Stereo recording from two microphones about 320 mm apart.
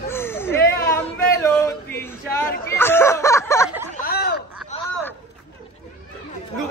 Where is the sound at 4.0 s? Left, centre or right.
Left.